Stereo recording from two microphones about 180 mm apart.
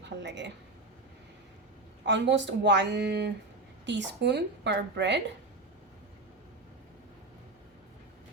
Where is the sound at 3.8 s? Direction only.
80° right.